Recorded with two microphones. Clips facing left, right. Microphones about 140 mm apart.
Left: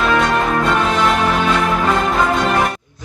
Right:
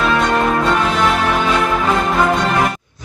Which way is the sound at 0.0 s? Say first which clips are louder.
Even; centre (ahead or behind).